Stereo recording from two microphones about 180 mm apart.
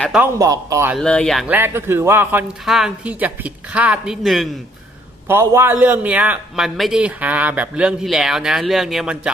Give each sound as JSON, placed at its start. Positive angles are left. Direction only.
{"t": 0.2, "sound": "a man's voice", "side_deg": -20}
{"t": 0.9, "sound": "a man's voice", "side_deg": 5}
{"t": 1.5, "sound": "a man's voice", "side_deg": -10}
{"t": 5.3, "sound": "a man's voice", "side_deg": -15}